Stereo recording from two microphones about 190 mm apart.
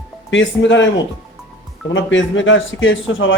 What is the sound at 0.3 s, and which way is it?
Speech, 75° left (ahead or behind).